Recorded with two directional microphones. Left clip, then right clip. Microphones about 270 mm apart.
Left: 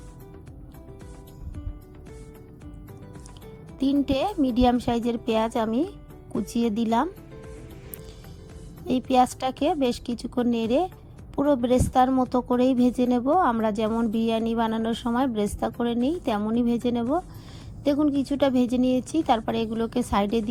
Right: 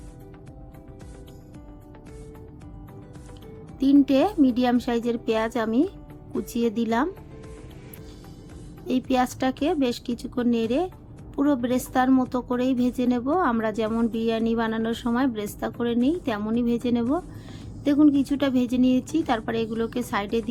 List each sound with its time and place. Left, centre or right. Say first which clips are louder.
3.8 s a woman's voice: right 5 dB; left
9.0 s a woman's voice: left 3 dB; left